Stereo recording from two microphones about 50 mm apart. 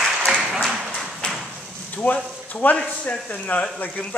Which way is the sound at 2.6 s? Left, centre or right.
Left.